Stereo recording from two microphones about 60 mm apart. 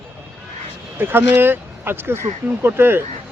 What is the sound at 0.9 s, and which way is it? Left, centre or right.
A man's voice, right.